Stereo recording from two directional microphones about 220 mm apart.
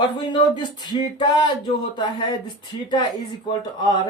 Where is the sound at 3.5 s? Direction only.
20° left (ahead or behind).